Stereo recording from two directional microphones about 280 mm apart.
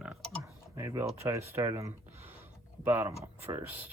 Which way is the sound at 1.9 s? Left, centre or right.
Right.